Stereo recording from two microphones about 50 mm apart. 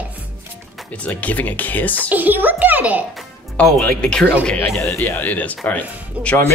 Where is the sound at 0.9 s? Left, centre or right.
Left.